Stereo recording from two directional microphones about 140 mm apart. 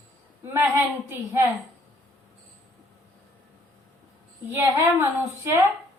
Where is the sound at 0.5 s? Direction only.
15° right (ahead or behind).